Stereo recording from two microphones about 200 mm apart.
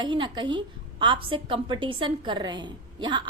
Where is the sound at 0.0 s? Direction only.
25° right (ahead or behind).